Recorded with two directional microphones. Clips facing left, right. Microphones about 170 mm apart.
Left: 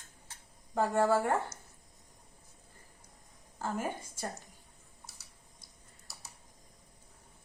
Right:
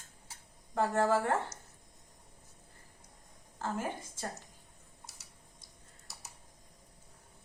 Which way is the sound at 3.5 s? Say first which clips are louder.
Left 1 dB; 15° left (ahead or behind).